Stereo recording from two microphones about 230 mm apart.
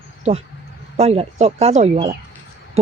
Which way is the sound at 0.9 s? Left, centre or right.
Right.